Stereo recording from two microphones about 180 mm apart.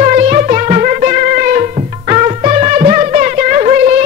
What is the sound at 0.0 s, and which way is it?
Music, 45° right (ahead or behind).